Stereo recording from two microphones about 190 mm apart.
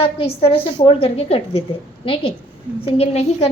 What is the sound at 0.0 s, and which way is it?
A woman's voice, 30° left (ahead or behind).